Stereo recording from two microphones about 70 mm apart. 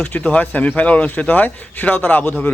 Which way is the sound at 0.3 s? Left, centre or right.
Left.